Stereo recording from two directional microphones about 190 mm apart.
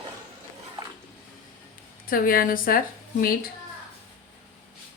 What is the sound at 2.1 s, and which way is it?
A woman's voice, 50° left (ahead or behind).